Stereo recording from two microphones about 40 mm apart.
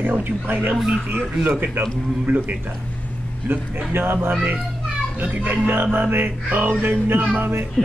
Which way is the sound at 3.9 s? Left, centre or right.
Right.